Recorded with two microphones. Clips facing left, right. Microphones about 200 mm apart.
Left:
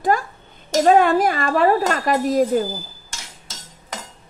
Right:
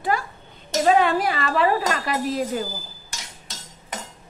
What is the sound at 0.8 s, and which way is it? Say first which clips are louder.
Speech: left 4 dB; 45° left (ahead or behind).